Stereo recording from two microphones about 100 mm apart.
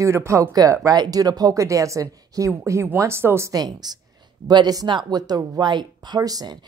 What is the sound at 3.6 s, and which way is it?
Speech, 40° right (ahead or behind).